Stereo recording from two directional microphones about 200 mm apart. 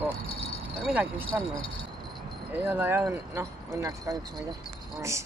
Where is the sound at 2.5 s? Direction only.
10° right (ahead or behind).